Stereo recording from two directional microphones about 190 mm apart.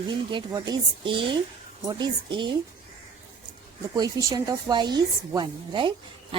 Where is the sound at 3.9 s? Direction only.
20° right (ahead or behind).